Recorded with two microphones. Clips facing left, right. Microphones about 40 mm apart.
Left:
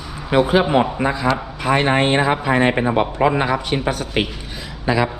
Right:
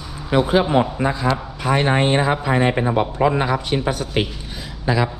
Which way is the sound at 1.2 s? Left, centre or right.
Left.